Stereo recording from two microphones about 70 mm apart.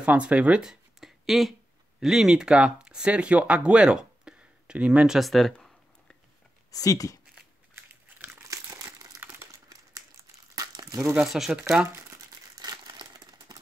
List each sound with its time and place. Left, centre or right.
0.0 s speech: centre
6.7 s speech: left
7.7 s crumpling: right
9.5 s crumpling: right
11.1 s speech: centre
12.5 s crumpling: right